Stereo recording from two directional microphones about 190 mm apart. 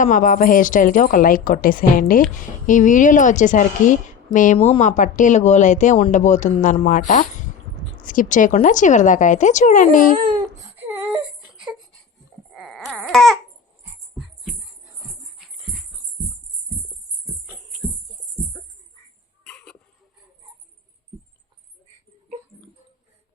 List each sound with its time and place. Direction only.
0.0 s a woman's voice: 45° left (ahead or behind)
4.5 s a woman's voice: 30° left (ahead or behind)
10.2 s speech: 25° right (ahead or behind)
10.8 s baby cry: 10° right (ahead or behind)
12.5 s a sound: centre (ahead or behind)
17.4 s music: 5° right (ahead or behind)
19.5 s a sound: 5° left (ahead or behind)